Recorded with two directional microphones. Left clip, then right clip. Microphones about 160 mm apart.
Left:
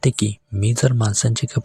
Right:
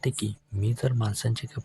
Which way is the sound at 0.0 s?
40° left (ahead or behind).